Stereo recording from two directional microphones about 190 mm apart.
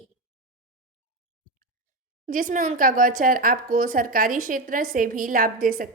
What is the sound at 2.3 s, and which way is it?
A woman's voice, 45° right (ahead or behind).